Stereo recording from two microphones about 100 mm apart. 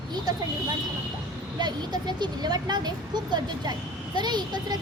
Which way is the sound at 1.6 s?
45° right (ahead or behind).